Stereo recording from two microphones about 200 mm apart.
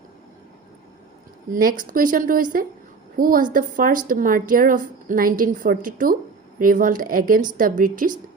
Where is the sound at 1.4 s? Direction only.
45° right (ahead or behind).